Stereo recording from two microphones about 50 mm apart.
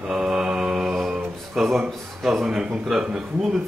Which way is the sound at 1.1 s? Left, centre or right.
Centre.